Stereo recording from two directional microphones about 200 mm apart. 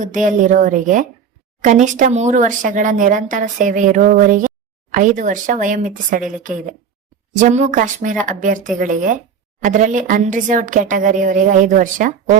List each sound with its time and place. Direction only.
0.0 s speech: 40° right (ahead or behind)